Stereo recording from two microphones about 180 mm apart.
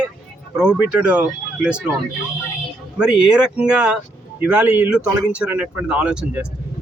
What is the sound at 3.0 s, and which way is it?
Speech, 5° right (ahead or behind).